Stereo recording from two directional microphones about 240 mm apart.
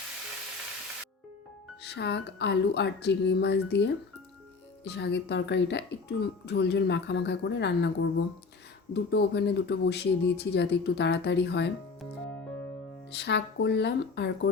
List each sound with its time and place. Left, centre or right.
1.8 s speech: left
13.1 s speech: left